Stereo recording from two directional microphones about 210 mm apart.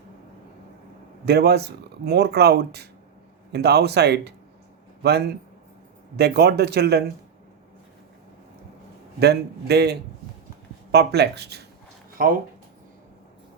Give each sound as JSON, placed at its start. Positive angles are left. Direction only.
{"t": 1.2, "sound": "speech", "side_deg": -50}
{"t": 9.2, "sound": "speech", "side_deg": -50}